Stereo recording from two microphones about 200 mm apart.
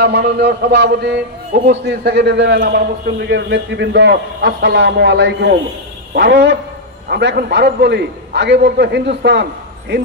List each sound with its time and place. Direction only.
0.0 s a man's voice: 55° right (ahead or behind)